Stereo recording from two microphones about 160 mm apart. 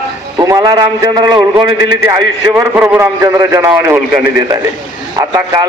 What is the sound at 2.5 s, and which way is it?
A man's voice, 15° right (ahead or behind).